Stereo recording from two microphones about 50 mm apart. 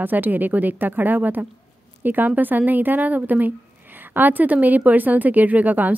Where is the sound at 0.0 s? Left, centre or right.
Right.